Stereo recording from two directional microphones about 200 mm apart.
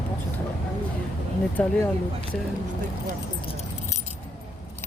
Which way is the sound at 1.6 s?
5° left (ahead or behind).